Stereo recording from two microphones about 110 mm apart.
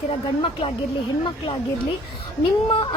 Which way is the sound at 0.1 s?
55° left (ahead or behind).